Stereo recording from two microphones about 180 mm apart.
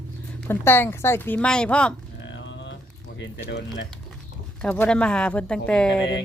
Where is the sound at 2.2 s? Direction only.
90° left.